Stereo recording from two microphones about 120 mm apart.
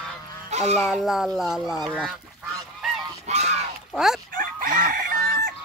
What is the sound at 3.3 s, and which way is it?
Goose, 65° right (ahead or behind).